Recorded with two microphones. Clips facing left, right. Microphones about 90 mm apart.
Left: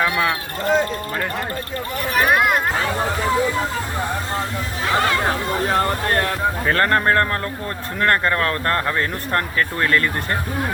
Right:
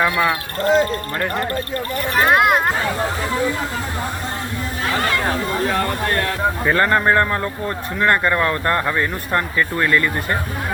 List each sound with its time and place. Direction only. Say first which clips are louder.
0.0 s speech: right 2 dB; 5° right (ahead or behind)
2.2 s speech: right 3 dB; 65° right (ahead or behind)
6.7 s speech: right 2 dB; 10° right (ahead or behind)